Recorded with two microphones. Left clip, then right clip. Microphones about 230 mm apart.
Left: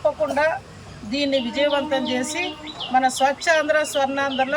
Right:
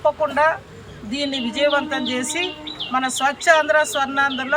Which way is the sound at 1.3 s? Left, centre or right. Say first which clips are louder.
Right 2 dB; centre.